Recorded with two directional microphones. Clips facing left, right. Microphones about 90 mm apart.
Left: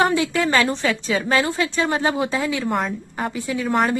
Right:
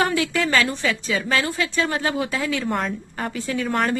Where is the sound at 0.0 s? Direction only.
25° left (ahead or behind).